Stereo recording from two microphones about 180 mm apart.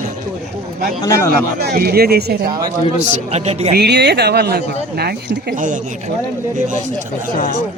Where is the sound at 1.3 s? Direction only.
60° right (ahead or behind).